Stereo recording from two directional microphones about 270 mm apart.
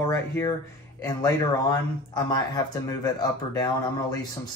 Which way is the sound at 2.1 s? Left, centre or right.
Centre.